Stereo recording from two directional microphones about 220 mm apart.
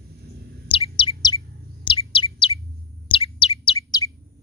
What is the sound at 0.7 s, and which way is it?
Chirp, 25° left (ahead or behind).